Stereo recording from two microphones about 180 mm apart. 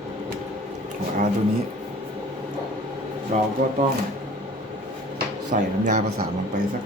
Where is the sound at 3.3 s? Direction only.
45° right (ahead or behind).